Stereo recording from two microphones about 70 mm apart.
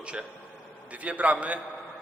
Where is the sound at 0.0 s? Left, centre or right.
Centre.